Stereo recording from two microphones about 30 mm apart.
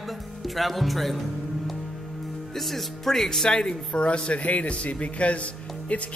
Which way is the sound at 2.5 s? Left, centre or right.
Centre.